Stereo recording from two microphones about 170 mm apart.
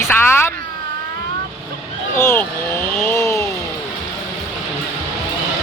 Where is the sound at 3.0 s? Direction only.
15° left (ahead or behind).